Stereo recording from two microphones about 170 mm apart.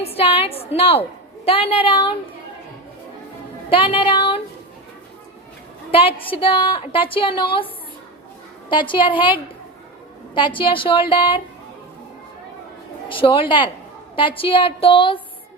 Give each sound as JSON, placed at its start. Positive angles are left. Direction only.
{"t": 0.0, "sound": "a woman's voice", "side_deg": 35}
{"t": 3.7, "sound": "a woman's voice", "side_deg": 30}
{"t": 5.9, "sound": "speech", "side_deg": 30}
{"t": 8.7, "sound": "a woman's voice", "side_deg": 30}
{"t": 13.1, "sound": "speech", "side_deg": 30}